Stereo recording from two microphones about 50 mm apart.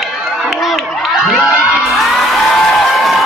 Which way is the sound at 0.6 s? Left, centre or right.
Centre.